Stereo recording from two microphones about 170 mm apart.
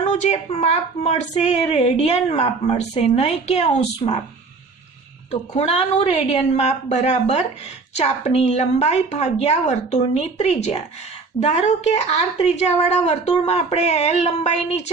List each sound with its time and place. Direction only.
0.0 s a woman's voice: 40° left (ahead or behind)
5.3 s a woman's voice: 40° left (ahead or behind)